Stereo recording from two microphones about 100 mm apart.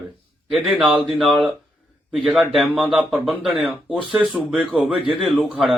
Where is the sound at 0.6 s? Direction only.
15° right (ahead or behind).